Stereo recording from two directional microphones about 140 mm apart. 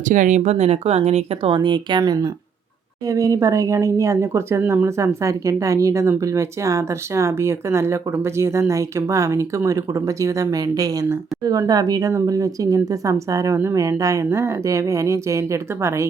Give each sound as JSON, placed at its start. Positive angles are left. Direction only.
{"t": 0.1, "sound": "speech", "side_deg": -65}